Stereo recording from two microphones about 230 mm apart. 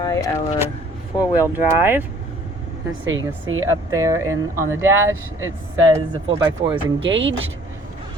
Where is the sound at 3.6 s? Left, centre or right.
Centre.